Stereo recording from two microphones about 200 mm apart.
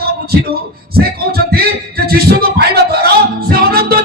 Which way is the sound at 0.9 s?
50° right (ahead or behind).